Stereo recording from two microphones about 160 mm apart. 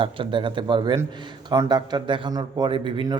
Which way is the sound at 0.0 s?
30° right (ahead or behind).